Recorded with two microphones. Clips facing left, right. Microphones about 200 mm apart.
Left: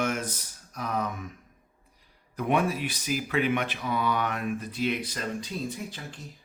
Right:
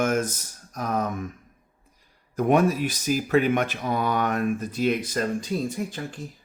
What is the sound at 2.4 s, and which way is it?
Speech, 45° right (ahead or behind).